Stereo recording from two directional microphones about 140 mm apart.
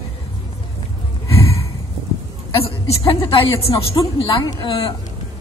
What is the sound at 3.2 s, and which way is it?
A woman's voice, 40° left (ahead or behind).